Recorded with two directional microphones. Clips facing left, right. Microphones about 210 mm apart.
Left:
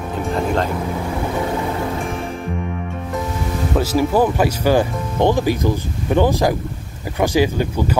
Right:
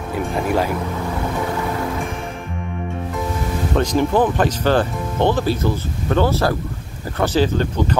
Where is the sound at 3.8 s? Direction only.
5° left (ahead or behind).